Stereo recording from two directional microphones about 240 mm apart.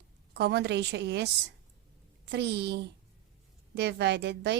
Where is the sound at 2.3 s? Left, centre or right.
Right.